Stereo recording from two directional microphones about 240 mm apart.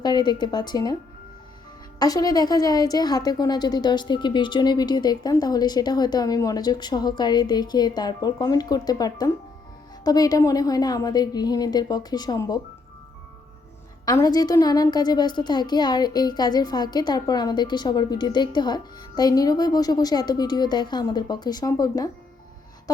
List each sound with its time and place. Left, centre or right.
0.0 s a woman's voice: centre
2.0 s a woman's voice: centre
14.0 s a woman's voice: centre